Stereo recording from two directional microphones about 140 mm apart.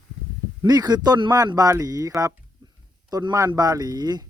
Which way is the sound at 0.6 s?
30° right (ahead or behind).